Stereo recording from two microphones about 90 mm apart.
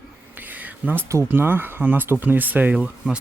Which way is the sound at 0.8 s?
20° right (ahead or behind).